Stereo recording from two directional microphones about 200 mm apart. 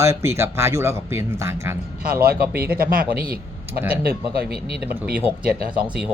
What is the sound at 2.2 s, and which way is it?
Speech, 50° right (ahead or behind).